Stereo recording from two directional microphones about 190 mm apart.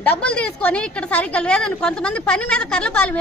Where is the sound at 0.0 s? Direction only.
5° left (ahead or behind).